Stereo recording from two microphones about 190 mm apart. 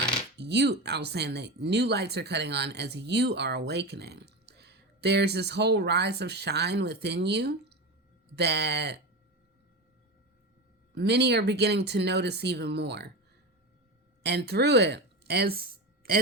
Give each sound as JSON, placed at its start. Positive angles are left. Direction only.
{"t": 0.3, "sound": "speech", "side_deg": -60}
{"t": 10.9, "sound": "speech", "side_deg": -60}
{"t": 14.2, "sound": "a woman's voice", "side_deg": -60}